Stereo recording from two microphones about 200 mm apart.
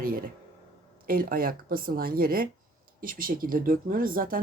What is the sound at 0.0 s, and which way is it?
Speech, 45° right (ahead or behind).